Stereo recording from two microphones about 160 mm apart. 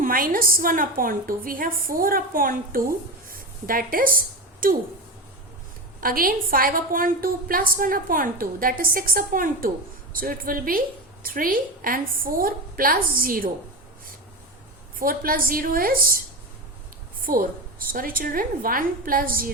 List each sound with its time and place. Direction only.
0.0 s a woman's voice: 60° right (ahead or behind)
3.2 s a sound: 65° right (ahead or behind)
4.6 s a woman's voice: 60° right (ahead or behind)
6.0 s a woman's voice: 65° right (ahead or behind)
14.9 s a woman's voice: 65° right (ahead or behind)
17.3 s a woman's voice: 60° right (ahead or behind)